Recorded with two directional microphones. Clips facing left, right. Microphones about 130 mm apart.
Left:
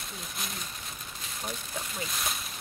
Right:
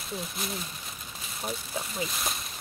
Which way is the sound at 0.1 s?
Centre (ahead or behind).